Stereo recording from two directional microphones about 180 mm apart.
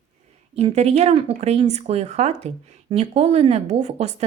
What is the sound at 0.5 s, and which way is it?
Speech, 35° right (ahead or behind).